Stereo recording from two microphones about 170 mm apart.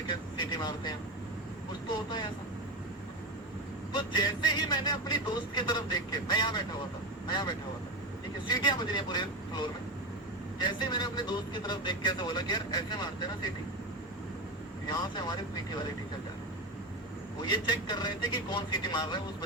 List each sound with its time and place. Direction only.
0.1 s speech: 25° left (ahead or behind)
3.9 s speech: 25° left (ahead or behind)
14.8 s speech: 25° left (ahead or behind)
17.4 s speech: 25° left (ahead or behind)